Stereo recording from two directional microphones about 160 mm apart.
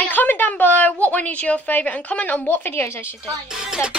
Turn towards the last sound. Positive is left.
turn(degrees=-5)  # may be behind; listen again after turning